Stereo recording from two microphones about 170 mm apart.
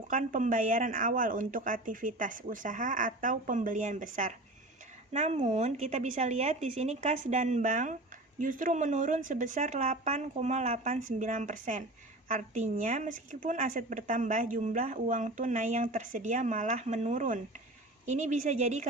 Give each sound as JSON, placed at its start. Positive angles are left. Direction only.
{"t": 0.1, "sound": "a woman's voice", "side_deg": -50}